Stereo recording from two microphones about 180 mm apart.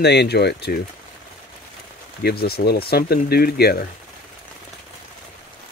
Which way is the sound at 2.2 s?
60° left (ahead or behind).